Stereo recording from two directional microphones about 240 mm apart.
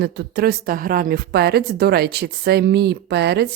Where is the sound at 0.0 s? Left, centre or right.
Right.